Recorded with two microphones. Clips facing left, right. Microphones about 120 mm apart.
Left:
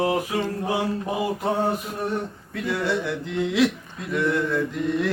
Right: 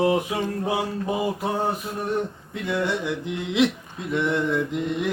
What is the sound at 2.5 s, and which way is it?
Male singing, 15° right (ahead or behind).